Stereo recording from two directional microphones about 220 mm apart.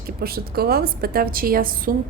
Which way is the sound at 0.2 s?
45° right (ahead or behind).